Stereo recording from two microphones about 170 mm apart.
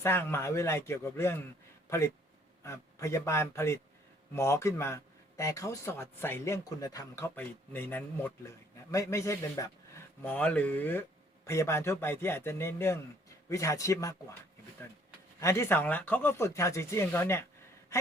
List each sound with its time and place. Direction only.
0.0 s speech: 15° left (ahead or behind)
10.2 s speech: 10° left (ahead or behind)
15.4 s speech: 15° left (ahead or behind)